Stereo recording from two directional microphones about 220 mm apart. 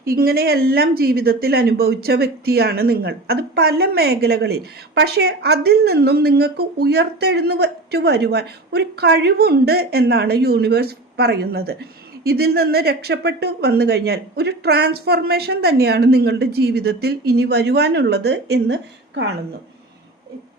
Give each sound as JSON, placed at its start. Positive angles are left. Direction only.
{"t": 0.0, "sound": "a woman's voice", "side_deg": -45}